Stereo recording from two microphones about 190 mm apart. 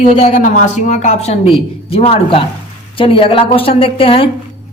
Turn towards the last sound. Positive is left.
turn(degrees=30)  # may be behind; listen again after turning